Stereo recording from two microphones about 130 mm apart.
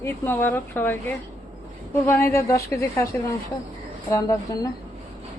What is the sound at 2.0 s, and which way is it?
A woman's voice, 15° left (ahead or behind).